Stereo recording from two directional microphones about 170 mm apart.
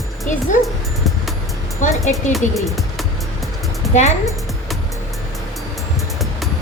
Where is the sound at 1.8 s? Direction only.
45° left (ahead or behind).